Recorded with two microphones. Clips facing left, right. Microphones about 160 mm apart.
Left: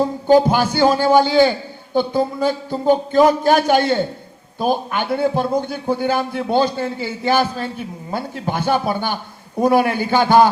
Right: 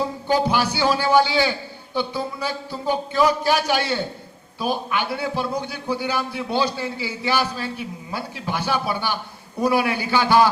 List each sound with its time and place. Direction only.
0.0 s a man's voice: 50° left (ahead or behind)